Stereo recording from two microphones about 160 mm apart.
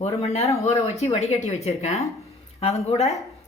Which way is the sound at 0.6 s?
40° left (ahead or behind).